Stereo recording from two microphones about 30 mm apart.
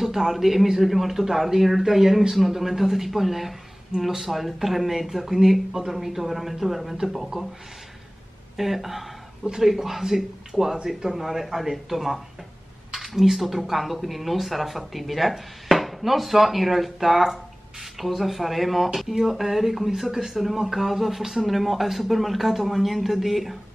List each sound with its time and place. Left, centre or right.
0.0 s a man's voice: centre
8.5 s speech: centre
10.5 s speech: centre
20.1 s speech: centre